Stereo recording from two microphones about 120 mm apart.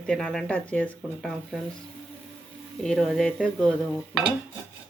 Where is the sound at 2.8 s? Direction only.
5° left (ahead or behind).